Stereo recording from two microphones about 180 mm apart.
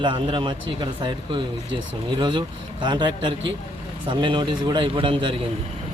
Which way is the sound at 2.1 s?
25° right (ahead or behind).